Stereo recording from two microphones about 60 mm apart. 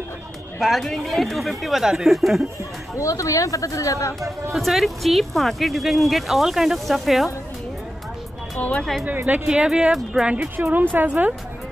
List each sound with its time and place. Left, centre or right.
0.6 s speech: centre
3.0 s speech: left
4.5 s speech: centre
8.5 s speech: left
9.0 s a woman's voice: right
9.5 s a woman's voice: centre; by 11.3 s right